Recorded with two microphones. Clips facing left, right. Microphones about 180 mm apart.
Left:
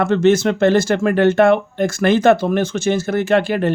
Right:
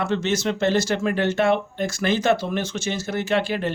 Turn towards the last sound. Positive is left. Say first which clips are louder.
# left 7 dB
turn(degrees=55)  # may be behind; listen again after turning